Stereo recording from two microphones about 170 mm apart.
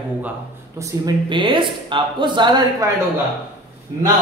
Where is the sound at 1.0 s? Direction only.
30° right (ahead or behind).